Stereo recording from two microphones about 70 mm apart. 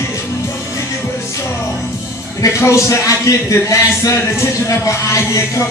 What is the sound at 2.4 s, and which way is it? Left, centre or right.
Speech, left.